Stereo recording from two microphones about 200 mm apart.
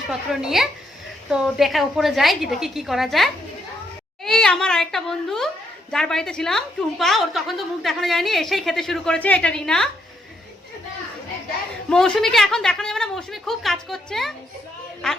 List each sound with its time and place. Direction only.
0.1 s a woman's voice: centre (ahead or behind)
11.9 s a woman's voice: 5° left (ahead or behind)